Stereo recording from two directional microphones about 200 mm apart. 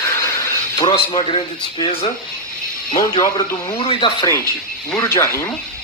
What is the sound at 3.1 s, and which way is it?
Speech, 20° left (ahead or behind).